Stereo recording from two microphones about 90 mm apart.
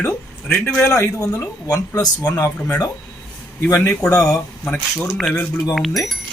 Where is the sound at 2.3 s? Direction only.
20° left (ahead or behind).